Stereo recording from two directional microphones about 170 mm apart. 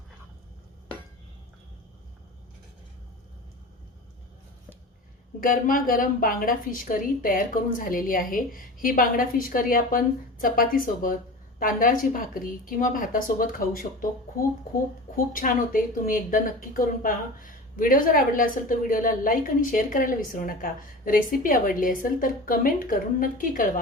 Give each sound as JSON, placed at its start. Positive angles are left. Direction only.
{"t": 5.4, "sound": "a woman's voice", "side_deg": 55}
{"t": 15.1, "sound": "a woman's voice", "side_deg": 50}